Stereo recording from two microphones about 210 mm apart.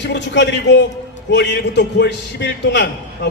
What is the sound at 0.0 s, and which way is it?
A man's voice, 55° left (ahead or behind).